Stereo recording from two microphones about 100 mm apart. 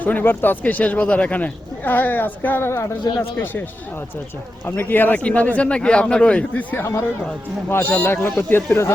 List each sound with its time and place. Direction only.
0.0 s speech: 15° left (ahead or behind)
4.6 s speech: 20° left (ahead or behind)